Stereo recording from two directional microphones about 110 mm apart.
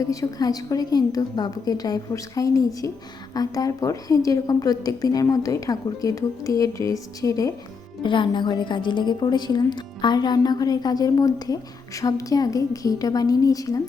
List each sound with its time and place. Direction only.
0.0 s a woman's voice: 30° left (ahead or behind)
8.0 s a woman's voice: 50° left (ahead or behind)